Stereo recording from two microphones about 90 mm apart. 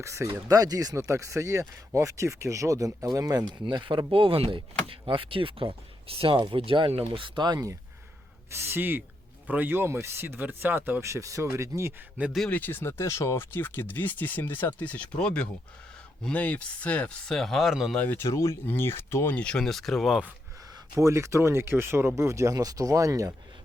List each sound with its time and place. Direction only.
0.0 s speech: 35° right (ahead or behind)
0.9 s speech: 35° right (ahead or behind)
3.5 s speech: 60° right (ahead or behind); by 4.6 s 90° right
4.9 s speech: 75° right (ahead or behind); by 7.8 s 45° right (ahead or behind)
8.4 s speech: 30° right (ahead or behind)
11.0 s speech: 35° right (ahead or behind)
12.5 s speech: 20° left (ahead or behind); by 17.9 s centre (ahead or behind)
17.9 s speech: 15° left (ahead or behind)
18.2 s speech: 30° left (ahead or behind)
19.4 s speech: 10° left (ahead or behind)
20.7 s speech: 40° right (ahead or behind)